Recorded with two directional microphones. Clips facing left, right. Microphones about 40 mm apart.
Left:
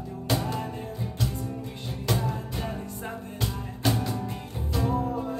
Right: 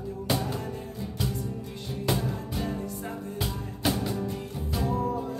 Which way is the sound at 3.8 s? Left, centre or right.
Centre.